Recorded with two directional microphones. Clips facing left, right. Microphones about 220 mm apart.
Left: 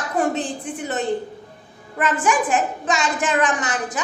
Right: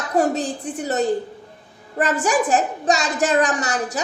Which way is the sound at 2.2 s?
40° right (ahead or behind).